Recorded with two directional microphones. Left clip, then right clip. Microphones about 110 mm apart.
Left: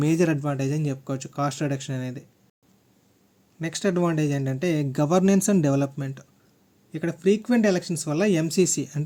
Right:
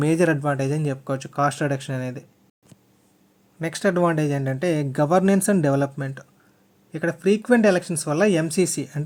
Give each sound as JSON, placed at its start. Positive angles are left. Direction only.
{"t": 0.0, "sound": "speech", "side_deg": 30}
{"t": 3.6, "sound": "speech", "side_deg": 25}